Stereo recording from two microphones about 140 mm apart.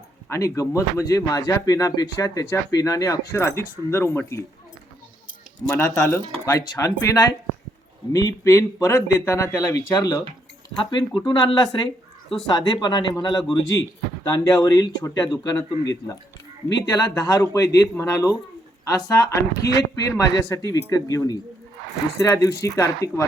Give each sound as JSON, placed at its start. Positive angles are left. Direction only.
{"t": 0.3, "sound": "speech", "side_deg": 25}
{"t": 5.6, "sound": "speech", "side_deg": 15}